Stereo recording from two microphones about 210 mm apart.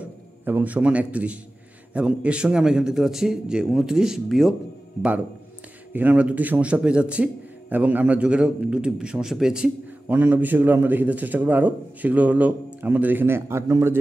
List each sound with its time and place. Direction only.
0.0 s a man's voice: 10° right (ahead or behind)
5.9 s a man's voice: 5° right (ahead or behind)